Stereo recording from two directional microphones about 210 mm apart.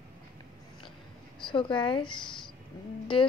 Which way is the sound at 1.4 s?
25° left (ahead or behind).